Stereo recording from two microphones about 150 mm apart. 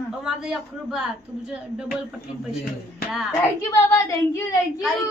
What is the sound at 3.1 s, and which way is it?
Speech, 5° right (ahead or behind).